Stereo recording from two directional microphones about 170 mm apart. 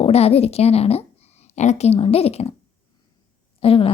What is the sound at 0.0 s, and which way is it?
A woman's voice, 35° left (ahead or behind).